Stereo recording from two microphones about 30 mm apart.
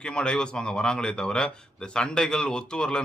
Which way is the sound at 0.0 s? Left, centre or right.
Left.